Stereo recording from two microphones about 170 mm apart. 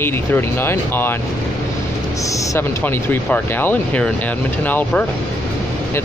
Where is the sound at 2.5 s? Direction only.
15° left (ahead or behind).